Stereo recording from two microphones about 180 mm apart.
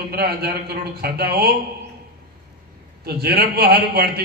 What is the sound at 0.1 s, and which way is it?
A man's voice, 60° right (ahead or behind).